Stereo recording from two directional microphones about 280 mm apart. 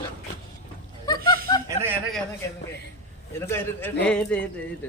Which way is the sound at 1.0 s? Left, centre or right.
Centre.